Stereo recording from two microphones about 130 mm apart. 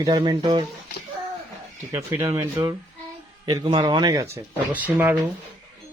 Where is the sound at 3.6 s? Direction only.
40° right (ahead or behind).